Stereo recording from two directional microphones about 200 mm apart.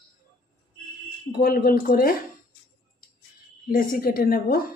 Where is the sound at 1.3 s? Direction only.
50° left (ahead or behind).